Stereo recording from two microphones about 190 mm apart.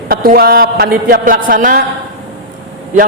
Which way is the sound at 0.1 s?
50° right (ahead or behind).